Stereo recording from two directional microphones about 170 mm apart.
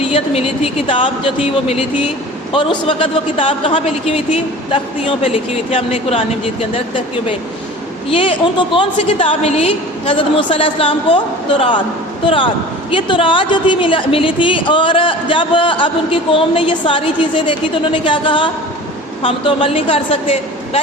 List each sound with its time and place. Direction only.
0.0 s a woman's voice: 35° left (ahead or behind)
12.9 s a woman's voice: 30° left (ahead or behind)